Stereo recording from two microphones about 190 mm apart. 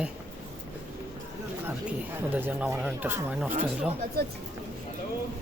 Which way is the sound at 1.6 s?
10° right (ahead or behind).